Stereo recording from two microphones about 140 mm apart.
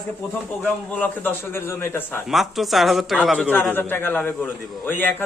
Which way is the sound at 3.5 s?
15° left (ahead or behind).